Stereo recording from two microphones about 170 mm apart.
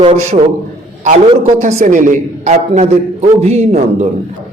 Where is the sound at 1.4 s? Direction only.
40° right (ahead or behind).